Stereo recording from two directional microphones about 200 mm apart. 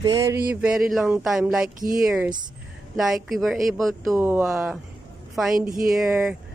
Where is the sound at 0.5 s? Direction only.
5° right (ahead or behind).